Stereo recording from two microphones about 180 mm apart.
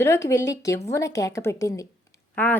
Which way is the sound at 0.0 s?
15° left (ahead or behind).